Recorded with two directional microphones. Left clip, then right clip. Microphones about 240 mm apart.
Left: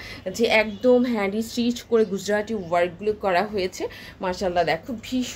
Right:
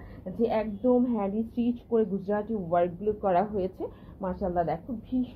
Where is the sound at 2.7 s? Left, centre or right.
Centre.